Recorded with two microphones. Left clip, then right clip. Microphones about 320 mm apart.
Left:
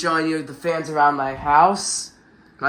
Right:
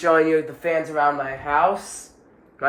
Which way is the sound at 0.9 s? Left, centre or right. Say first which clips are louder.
Left 3 dB; left.